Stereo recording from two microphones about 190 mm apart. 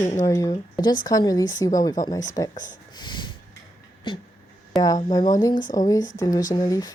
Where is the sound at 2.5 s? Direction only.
40° left (ahead or behind).